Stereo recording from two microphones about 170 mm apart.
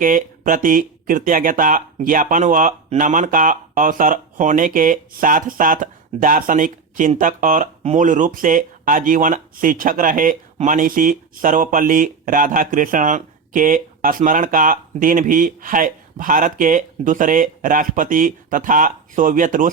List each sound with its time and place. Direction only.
0.0 s speech: 50° right (ahead or behind)